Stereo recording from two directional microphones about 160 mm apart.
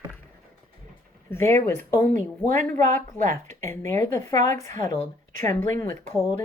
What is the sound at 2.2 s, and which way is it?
Speech, 50° right (ahead or behind).